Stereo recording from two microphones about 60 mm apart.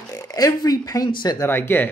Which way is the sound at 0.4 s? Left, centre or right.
Left.